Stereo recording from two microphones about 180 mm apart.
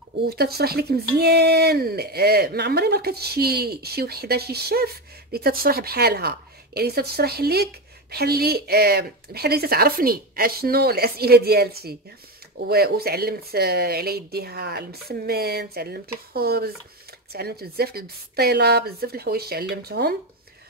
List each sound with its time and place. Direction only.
0.3 s speech: 60° right (ahead or behind)